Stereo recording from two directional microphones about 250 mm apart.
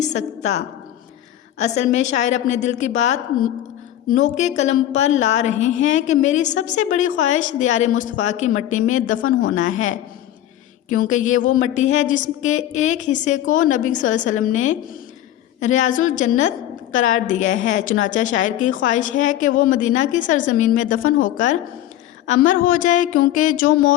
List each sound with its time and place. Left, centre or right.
0.0 s a woman's voice: left
4.2 s a woman's voice: left